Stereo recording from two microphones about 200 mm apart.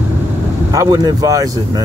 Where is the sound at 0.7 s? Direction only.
20° right (ahead or behind).